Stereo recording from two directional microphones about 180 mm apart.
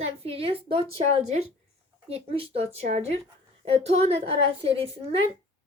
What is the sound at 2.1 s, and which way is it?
A woman's voice, 35° right (ahead or behind).